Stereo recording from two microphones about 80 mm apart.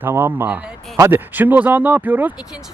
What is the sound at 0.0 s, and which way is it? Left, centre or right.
Speech, right.